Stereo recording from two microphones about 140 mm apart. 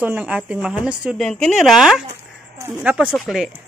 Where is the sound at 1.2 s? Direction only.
5° left (ahead or behind).